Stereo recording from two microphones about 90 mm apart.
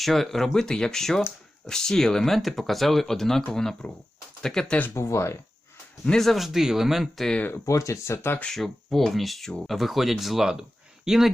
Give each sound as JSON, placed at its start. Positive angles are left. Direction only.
{"t": 0.0, "sound": "speech", "side_deg": 0}
{"t": 4.9, "sound": "speech", "side_deg": 30}
{"t": 6.1, "sound": "speech", "side_deg": 5}
{"t": 7.3, "sound": "speech", "side_deg": 25}
{"t": 7.6, "sound": "speech", "side_deg": 40}
{"t": 8.4, "sound": "speech", "side_deg": 5}